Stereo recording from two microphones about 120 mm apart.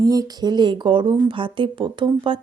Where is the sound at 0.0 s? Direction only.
30° right (ahead or behind).